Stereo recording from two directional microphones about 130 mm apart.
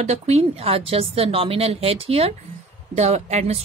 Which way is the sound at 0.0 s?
55° right (ahead or behind).